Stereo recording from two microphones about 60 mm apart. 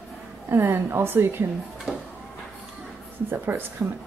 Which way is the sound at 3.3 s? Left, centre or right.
Right.